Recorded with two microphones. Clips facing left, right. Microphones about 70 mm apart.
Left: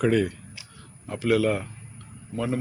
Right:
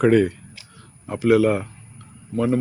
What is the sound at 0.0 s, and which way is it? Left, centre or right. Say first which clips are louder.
Speech: right 6 dB; right.